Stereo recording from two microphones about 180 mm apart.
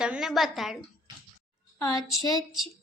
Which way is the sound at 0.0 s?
5° right (ahead or behind).